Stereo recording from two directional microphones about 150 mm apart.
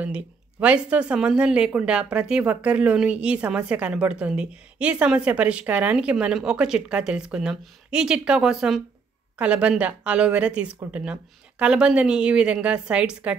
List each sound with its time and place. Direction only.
0.0 s speech: 10° right (ahead or behind)